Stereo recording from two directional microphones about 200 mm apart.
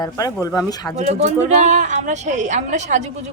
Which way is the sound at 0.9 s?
35° right (ahead or behind).